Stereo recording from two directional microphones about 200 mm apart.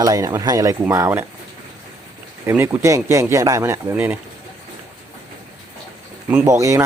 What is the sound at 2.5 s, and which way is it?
Speech, 10° right (ahead or behind).